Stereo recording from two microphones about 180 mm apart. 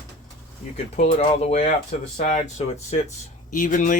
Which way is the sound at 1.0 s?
35° left (ahead or behind).